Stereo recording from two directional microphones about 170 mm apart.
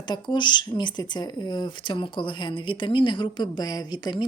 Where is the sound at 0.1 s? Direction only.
25° left (ahead or behind).